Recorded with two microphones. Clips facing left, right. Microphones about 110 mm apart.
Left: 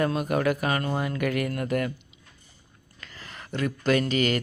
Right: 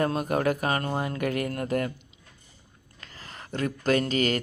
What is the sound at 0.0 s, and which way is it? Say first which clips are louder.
Speech: left 1 dB; 35° right (ahead or behind).